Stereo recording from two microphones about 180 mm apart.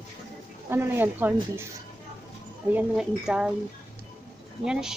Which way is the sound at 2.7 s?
5° right (ahead or behind).